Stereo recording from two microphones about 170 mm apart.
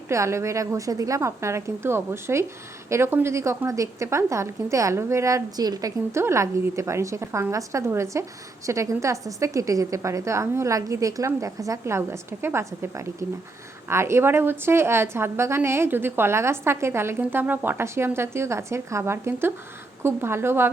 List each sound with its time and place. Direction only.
0.1 s a woman's voice: 15° right (ahead or behind)